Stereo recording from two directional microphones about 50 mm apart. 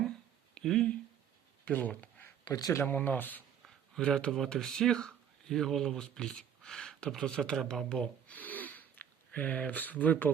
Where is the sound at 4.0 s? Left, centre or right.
Centre.